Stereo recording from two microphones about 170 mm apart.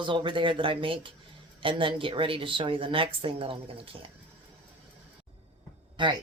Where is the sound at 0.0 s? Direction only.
30° right (ahead or behind).